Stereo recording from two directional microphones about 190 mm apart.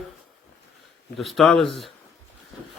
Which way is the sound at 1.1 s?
Centre (ahead or behind).